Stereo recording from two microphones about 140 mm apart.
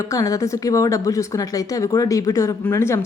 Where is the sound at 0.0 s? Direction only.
25° left (ahead or behind).